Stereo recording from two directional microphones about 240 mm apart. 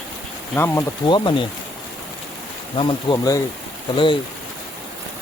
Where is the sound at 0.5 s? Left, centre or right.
Centre.